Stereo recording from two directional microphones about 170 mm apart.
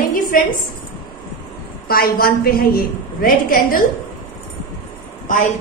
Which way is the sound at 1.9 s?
60° left (ahead or behind).